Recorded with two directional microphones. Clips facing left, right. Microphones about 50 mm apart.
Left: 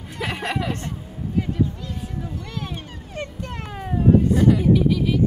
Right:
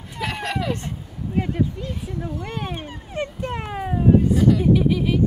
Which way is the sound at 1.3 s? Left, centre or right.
Right.